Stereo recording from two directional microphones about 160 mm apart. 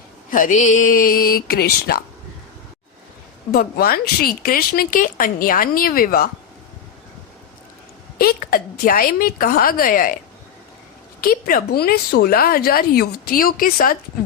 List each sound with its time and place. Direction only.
0.3 s speech: 55° left (ahead or behind); by 2.0 s 75° left (ahead or behind)
3.5 s speech: 70° left (ahead or behind)
8.2 s speech: 65° left (ahead or behind)
11.2 s a woman's voice: 65° left (ahead or behind)